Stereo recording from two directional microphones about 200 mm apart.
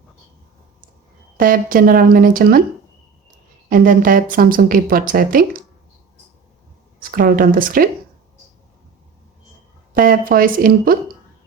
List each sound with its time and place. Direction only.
1.4 s speech: 45° right (ahead or behind)
3.7 s speech: 45° right (ahead or behind)
7.0 s speech: 45° right (ahead or behind)
10.0 s speech: 45° right (ahead or behind)